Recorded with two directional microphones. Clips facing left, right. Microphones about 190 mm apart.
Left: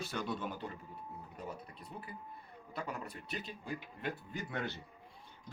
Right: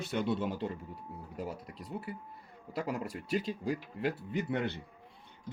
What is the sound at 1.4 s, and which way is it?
Speech, 90° right.